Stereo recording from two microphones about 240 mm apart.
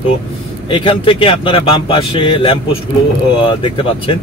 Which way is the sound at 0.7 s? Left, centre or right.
Left.